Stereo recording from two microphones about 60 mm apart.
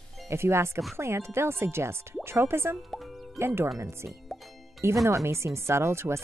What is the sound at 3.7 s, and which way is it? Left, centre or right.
Speech, right.